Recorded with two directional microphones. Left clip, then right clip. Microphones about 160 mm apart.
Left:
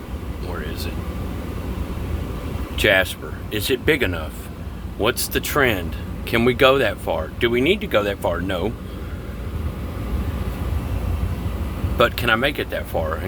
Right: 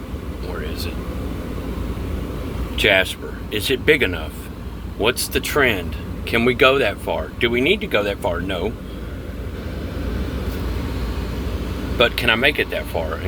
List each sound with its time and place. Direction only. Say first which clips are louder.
2.7 s speech: right 1 dB; 45° left (ahead or behind)
12.1 s speech: right 3 dB; 25° left (ahead or behind)